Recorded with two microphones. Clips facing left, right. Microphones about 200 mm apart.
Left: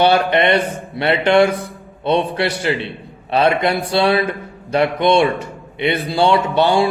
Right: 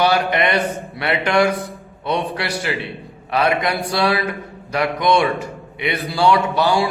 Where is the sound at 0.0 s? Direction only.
25° left (ahead or behind).